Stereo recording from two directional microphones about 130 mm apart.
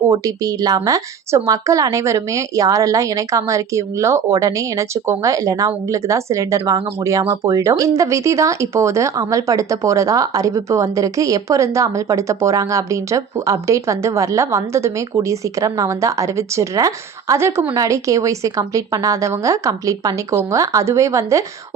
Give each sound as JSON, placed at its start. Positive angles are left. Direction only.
{"t": 0.1, "sound": "a woman's voice", "side_deg": -25}